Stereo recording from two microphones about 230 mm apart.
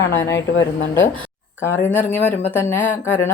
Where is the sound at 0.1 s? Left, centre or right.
Centre.